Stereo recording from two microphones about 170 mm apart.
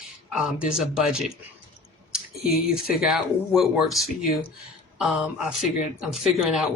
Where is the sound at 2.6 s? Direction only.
5° right (ahead or behind).